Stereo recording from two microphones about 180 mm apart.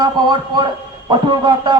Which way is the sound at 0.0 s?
25° right (ahead or behind).